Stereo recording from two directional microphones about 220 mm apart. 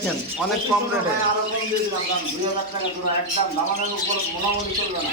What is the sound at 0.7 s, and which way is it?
Speech, centre (ahead or behind).